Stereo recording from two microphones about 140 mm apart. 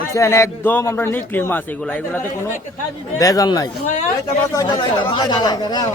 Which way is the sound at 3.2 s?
25° left (ahead or behind).